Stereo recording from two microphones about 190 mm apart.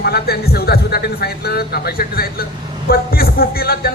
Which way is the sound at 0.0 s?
55° left (ahead or behind).